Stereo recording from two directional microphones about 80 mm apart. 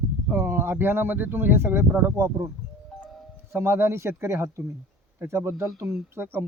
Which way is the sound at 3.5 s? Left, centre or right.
Right.